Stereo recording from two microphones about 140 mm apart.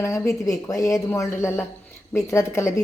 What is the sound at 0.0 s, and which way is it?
A woman's voice, 20° left (ahead or behind).